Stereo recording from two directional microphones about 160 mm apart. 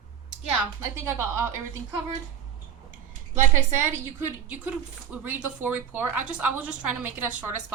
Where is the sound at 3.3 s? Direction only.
50° right (ahead or behind).